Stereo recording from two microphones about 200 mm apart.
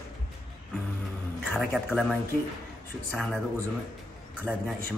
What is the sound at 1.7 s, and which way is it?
Speech, centre (ahead or behind).